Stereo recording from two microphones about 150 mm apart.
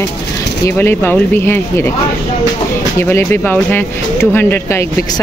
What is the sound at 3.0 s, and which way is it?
Speech, 15° left (ahead or behind).